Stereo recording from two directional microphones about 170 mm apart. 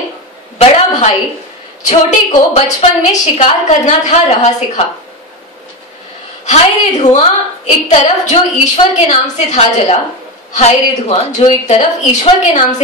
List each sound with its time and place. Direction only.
0.6 s a woman's voice: 30° left (ahead or behind)
1.9 s a woman's voice: 45° left (ahead or behind)
6.4 s a woman's voice: 45° left (ahead or behind)